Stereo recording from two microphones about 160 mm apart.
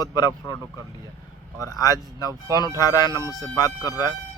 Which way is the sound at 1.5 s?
20° left (ahead or behind).